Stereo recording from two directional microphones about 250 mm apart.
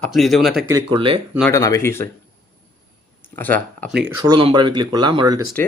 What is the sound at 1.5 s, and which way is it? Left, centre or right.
Speech, centre.